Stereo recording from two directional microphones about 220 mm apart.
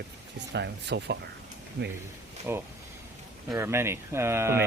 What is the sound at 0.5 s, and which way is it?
Speech, 50° right (ahead or behind).